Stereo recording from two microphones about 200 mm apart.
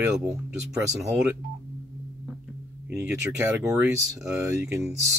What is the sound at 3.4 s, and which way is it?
Speech, 15° right (ahead or behind).